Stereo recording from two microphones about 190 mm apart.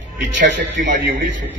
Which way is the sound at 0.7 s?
40° right (ahead or behind).